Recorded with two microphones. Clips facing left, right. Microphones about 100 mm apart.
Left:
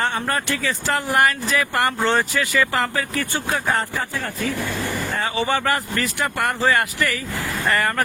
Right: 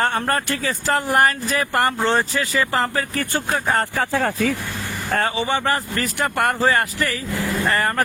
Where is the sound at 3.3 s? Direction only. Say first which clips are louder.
Right 2 dB; 45° right (ahead or behind).